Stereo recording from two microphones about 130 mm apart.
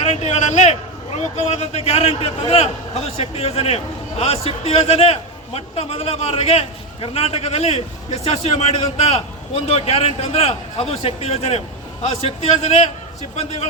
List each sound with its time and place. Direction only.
0.0 s a man's voice: 60° left (ahead or behind)